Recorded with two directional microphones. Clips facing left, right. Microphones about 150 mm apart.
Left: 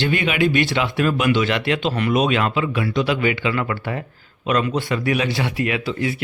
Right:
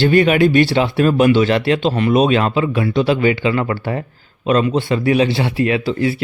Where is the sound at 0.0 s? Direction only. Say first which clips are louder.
Right 7 dB; 40° right (ahead or behind).